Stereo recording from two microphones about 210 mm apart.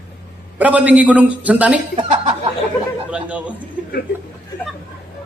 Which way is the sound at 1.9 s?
25° right (ahead or behind).